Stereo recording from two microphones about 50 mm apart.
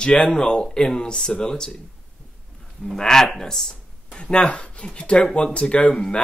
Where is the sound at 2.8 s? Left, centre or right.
Centre.